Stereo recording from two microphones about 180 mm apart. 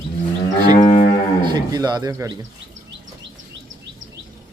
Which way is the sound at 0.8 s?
25° left (ahead or behind).